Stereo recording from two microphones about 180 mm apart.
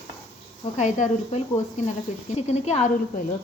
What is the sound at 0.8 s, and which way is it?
A woman's voice, 40° left (ahead or behind).